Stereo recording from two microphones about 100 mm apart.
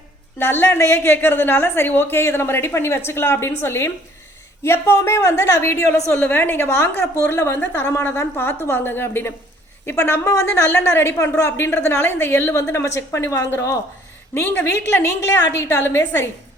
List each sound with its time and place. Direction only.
0.3 s a woman's voice: 20° left (ahead or behind)